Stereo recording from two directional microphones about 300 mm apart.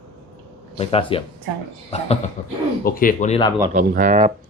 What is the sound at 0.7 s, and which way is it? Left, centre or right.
Speech, centre.